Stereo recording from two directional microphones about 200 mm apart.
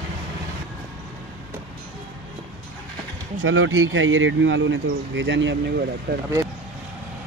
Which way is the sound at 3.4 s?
75° right (ahead or behind).